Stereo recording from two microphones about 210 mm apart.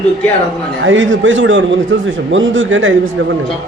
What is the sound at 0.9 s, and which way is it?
A man's voice, 65° right (ahead or behind).